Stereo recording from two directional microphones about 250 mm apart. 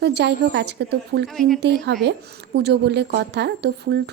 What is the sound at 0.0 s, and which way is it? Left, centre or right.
Speech, right.